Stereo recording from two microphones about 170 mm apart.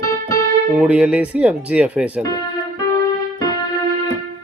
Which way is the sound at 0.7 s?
10° right (ahead or behind).